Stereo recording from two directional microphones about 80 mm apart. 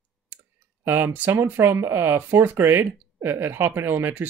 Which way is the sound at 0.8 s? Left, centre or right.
Right.